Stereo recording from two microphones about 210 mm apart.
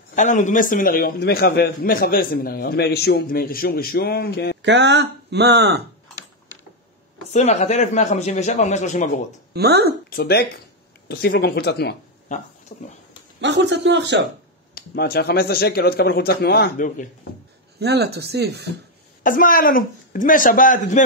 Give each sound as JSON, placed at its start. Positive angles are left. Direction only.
{"t": 0.1, "sound": "a man's voice", "side_deg": 35}
{"t": 4.6, "sound": "speech", "side_deg": -55}
{"t": 7.3, "sound": "speech", "side_deg": 35}
{"t": 9.5, "sound": "speech", "side_deg": -50}
{"t": 10.0, "sound": "a man's voice", "side_deg": 45}
{"t": 12.7, "sound": "speech", "side_deg": 35}
{"t": 13.4, "sound": "speech", "side_deg": -55}
{"t": 14.8, "sound": "a man's voice", "side_deg": 50}
{"t": 17.7, "sound": "speech", "side_deg": -50}
{"t": 19.2, "sound": "speech", "side_deg": 40}